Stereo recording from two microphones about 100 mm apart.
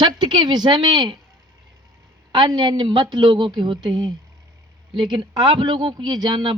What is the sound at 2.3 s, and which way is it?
A woman's voice, 45° right (ahead or behind).